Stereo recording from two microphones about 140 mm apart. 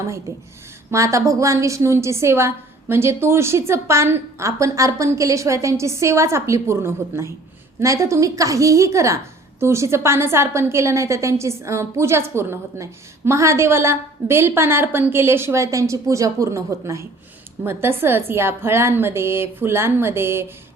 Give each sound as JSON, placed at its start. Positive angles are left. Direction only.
{"t": 0.9, "sound": "a woman's voice", "side_deg": -20}